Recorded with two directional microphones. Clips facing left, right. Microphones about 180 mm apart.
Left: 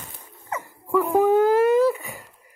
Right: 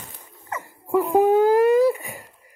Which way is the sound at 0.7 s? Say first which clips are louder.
Right 1 dB; 15° right (ahead or behind).